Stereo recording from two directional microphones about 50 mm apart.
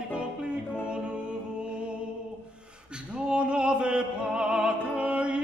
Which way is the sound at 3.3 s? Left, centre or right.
Right.